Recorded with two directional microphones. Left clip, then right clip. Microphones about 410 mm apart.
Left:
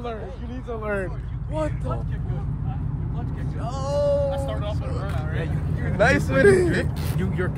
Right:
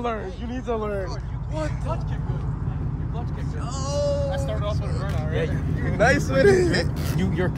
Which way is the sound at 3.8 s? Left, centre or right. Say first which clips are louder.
Left 3 dB; centre.